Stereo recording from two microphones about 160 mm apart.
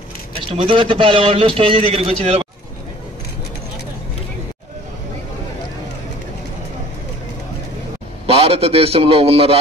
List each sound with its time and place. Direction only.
0.5 s a man's voice: 35° right (ahead or behind)
8.3 s a man's voice: 35° right (ahead or behind)